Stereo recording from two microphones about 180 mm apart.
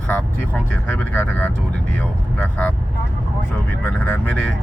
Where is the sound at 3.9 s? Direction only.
10° left (ahead or behind).